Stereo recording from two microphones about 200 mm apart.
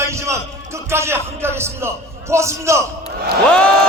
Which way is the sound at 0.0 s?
15° right (ahead or behind).